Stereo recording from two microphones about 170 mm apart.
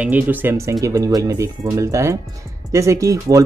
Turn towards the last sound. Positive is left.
turn(degrees=-20)  # may be behind; listen again after turning